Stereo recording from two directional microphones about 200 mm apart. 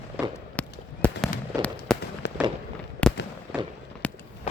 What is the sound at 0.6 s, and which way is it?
Fireworks, 5° left (ahead or behind).